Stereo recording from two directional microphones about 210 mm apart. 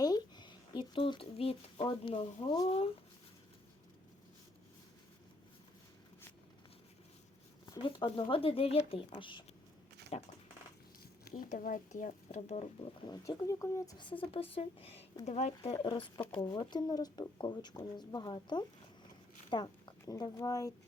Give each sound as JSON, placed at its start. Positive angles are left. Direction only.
{"t": 0.0, "sound": "speech", "side_deg": 20}
{"t": 7.7, "sound": "speech", "side_deg": 25}
{"t": 11.3, "sound": "speech", "side_deg": 40}
{"t": 13.1, "sound": "speech", "side_deg": 15}